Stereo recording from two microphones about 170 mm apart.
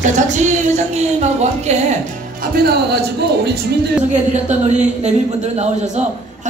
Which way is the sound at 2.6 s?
75° right (ahead or behind).